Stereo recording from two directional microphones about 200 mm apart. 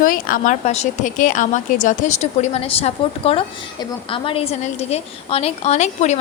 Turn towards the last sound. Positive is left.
turn(degrees=35)  # may be behind; listen again after turning